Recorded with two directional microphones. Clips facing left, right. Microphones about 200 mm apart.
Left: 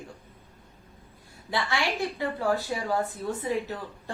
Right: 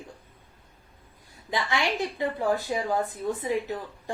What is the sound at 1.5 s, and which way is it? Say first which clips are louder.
Speech: right 1 dB; 20° right (ahead or behind).